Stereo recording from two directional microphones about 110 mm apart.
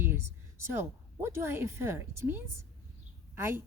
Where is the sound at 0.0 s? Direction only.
20° right (ahead or behind).